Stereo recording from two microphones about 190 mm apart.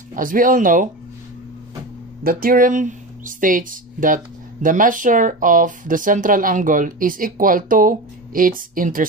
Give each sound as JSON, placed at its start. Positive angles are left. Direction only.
{"t": 0.1, "sound": "speech", "side_deg": -45}
{"t": 2.2, "sound": "speech", "side_deg": -50}